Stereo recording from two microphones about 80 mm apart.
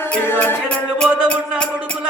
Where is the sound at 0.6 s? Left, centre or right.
Centre.